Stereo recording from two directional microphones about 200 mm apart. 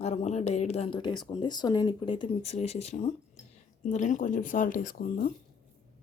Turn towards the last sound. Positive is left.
turn(degrees=45)  # may be behind; listen again after turning